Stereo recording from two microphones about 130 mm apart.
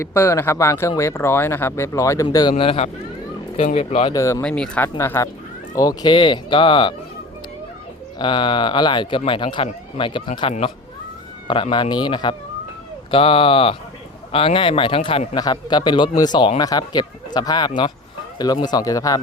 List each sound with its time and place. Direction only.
0.0 s speech: 20° left (ahead or behind); by 4.1 s 55° left (ahead or behind)
4.1 s speech: 25° left (ahead or behind)
4.4 s speech: 10° left (ahead or behind)
4.9 s speech: 20° left (ahead or behind); by 6.9 s 40° left (ahead or behind)
8.2 s speech: 40° left (ahead or behind)